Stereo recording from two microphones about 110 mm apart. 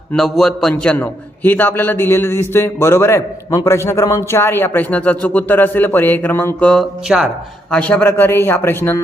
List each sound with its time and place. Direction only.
0.1 s a man's voice: 5° left (ahead or behind)
7.1 s speech: 5° right (ahead or behind)
7.7 s a man's voice: 10° left (ahead or behind)